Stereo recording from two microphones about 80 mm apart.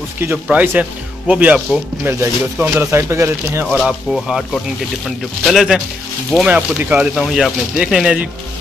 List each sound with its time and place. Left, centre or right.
0.5 s speech: centre; by 3.6 s right
3.7 s speech: centre
6.4 s speech: centre
7.2 s speech: centre